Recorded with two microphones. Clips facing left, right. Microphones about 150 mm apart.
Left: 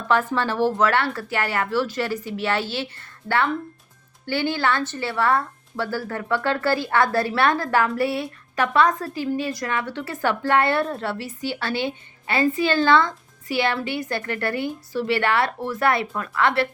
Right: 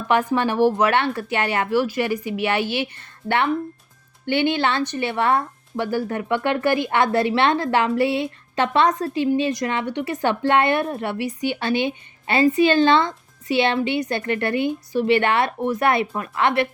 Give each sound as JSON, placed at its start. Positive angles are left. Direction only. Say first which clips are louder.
{"t": 0.1, "sound": "a woman's voice", "louder": "right 2 dB", "side_deg": -15}